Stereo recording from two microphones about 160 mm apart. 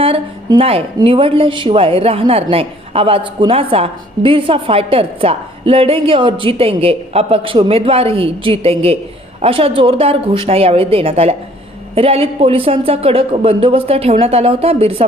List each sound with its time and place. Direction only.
0.0 s a woman's voice: 35° right (ahead or behind)